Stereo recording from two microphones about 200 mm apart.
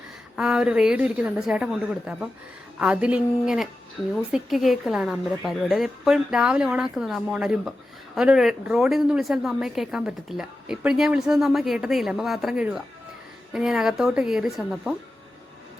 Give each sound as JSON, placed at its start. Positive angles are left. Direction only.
{"t": 0.3, "sound": "a woman's voice", "side_deg": -5}